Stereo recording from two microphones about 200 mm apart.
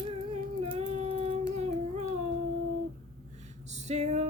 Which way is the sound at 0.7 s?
30° right (ahead or behind).